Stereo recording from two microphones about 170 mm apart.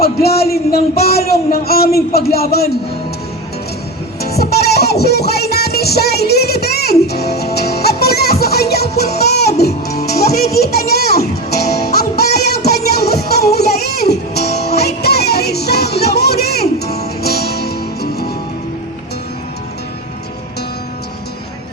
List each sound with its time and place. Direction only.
0.0 s speech: 65° left (ahead or behind)
4.2 s music: 70° left (ahead or behind)
10.6 s a sound: 65° left (ahead or behind)
11.0 s music: 65° left (ahead or behind)